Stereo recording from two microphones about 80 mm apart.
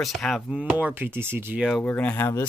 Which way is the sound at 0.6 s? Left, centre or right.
Centre.